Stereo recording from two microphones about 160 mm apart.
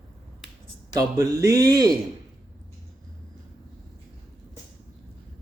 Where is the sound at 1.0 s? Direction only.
20° right (ahead or behind).